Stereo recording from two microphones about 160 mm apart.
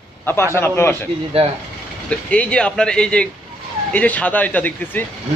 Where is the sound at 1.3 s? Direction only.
35° right (ahead or behind).